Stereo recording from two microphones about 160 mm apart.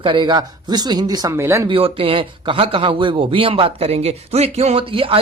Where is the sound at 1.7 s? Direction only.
35° right (ahead or behind).